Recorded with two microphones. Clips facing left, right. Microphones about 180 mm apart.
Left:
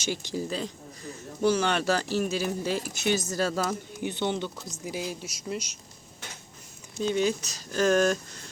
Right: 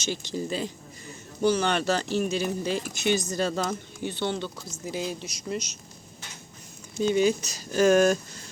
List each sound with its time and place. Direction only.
0.0 s speech: 10° left (ahead or behind)
0.5 s a man's voice: centre (ahead or behind)
4.0 s speech: 15° left (ahead or behind)
7.0 s a man's voice: 5° right (ahead or behind)